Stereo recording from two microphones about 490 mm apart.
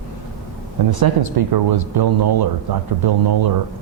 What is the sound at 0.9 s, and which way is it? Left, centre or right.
Speech, right.